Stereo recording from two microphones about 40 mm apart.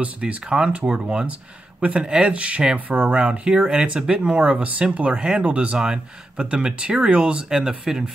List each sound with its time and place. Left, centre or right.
0.2 s speech: right